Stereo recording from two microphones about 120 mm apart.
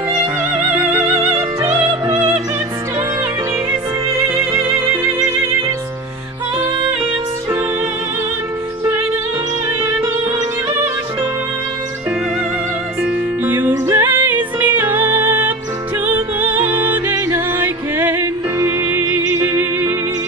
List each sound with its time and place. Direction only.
0.7 s music: 15° right (ahead or behind)
4.2 s music: 20° right (ahead or behind)
13.0 s music: 15° right (ahead or behind)